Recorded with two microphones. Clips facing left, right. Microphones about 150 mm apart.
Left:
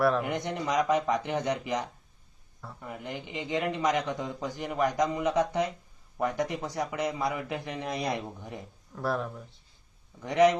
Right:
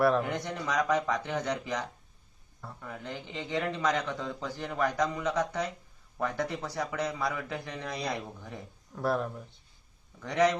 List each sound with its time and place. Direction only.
0.2 s a man's voice: 20° left (ahead or behind)
9.0 s speech: centre (ahead or behind)
10.2 s a man's voice: 20° left (ahead or behind)